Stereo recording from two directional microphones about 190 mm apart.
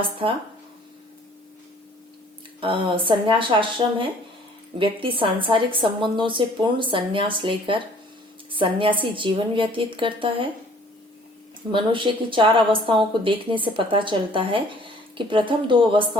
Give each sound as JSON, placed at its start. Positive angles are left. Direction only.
{"t": 2.6, "sound": "a woman's voice", "side_deg": -25}
{"t": 11.7, "sound": "a woman's voice", "side_deg": -25}